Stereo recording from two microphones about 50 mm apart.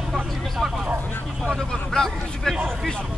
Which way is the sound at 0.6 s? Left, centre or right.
Centre.